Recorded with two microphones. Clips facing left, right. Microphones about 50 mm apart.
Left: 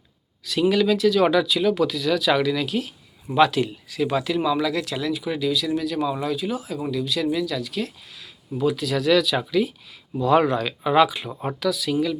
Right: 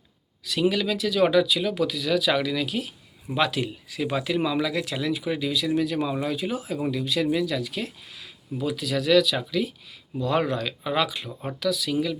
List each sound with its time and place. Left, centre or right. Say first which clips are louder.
0.7 s speech: left 7 dB; centre
8.6 s speech: left 4 dB; centre